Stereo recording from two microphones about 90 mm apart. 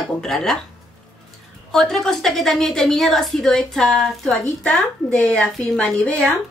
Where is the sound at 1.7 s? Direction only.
5° left (ahead or behind).